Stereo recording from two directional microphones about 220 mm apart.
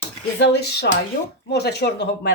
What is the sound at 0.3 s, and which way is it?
Speech, 50° left (ahead or behind).